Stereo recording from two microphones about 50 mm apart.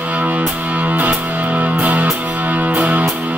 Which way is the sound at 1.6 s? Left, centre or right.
Right.